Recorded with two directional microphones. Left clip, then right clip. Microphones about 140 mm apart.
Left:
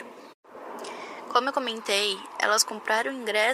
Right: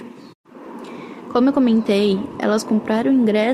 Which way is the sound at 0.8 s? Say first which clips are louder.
Right 3 dB; 45° left (ahead or behind).